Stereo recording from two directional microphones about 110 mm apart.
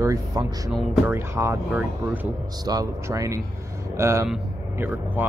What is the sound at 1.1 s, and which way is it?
Speech, 20° right (ahead or behind).